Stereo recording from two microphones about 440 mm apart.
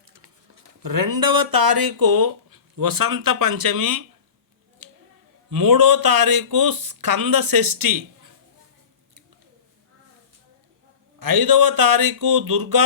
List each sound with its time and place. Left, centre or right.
0.8 s speech: right
4.8 s a sound: right
5.5 s speech: right
11.2 s speech: right